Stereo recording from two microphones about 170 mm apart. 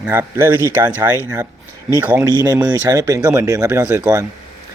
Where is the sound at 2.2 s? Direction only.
20° right (ahead or behind).